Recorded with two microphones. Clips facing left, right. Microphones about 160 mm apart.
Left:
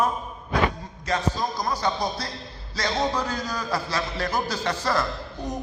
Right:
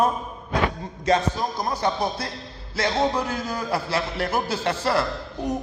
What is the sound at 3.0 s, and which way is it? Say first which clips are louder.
A man's voice: right 2 dB; 25° right (ahead or behind).